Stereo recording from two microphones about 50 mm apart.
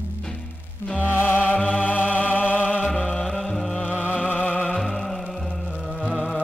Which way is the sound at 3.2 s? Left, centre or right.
Centre.